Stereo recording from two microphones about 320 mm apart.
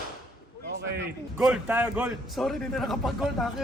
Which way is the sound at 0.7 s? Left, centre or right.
Right.